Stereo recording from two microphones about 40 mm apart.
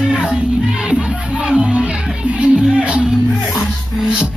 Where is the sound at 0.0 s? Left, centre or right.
Right.